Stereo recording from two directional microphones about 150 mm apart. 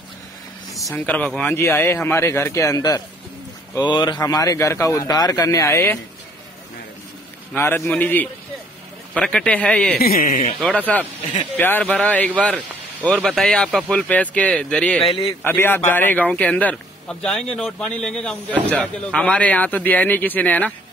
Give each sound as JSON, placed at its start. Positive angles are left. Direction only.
{"t": 0.7, "sound": "a sound", "side_deg": 0}
{"t": 1.0, "sound": "a man's voice", "side_deg": 10}
{"t": 7.5, "sound": "a man's voice", "side_deg": 15}
{"t": 9.9, "sound": "speech", "side_deg": 80}
{"t": 10.9, "sound": "a man's voice", "side_deg": 10}
{"t": 15.0, "sound": "a man's voice", "side_deg": 30}
{"t": 15.4, "sound": "a man's voice", "side_deg": 15}